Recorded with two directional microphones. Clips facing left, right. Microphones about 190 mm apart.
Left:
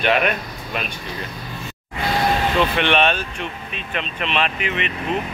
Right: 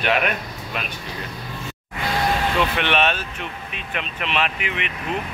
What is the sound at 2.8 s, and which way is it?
Speech, 5° right (ahead or behind).